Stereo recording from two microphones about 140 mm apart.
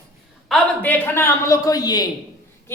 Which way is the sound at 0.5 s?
10° left (ahead or behind).